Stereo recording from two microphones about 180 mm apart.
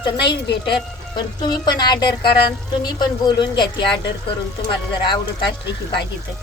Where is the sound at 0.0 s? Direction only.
25° left (ahead or behind).